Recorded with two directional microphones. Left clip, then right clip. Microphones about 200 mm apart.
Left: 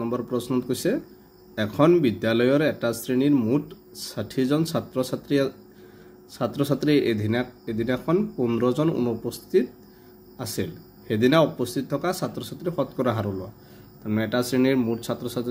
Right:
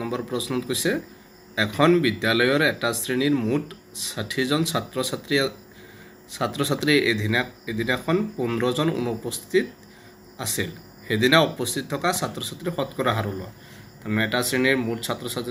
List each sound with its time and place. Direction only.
0.0 s speech: 30° left (ahead or behind)